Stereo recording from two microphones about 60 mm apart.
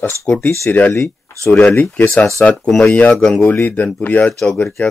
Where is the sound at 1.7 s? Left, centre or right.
Left.